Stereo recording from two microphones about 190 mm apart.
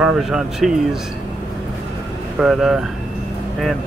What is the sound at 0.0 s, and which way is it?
Speech, 5° right (ahead or behind).